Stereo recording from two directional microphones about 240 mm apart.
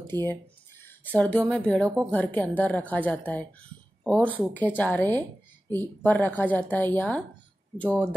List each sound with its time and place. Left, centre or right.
0.3 s speech: centre